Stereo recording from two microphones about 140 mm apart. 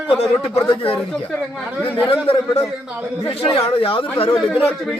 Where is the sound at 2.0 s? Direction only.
40° left (ahead or behind).